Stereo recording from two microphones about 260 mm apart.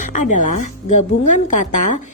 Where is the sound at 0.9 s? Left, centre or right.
Left.